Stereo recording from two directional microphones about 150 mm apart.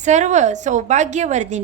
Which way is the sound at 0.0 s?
50° right (ahead or behind).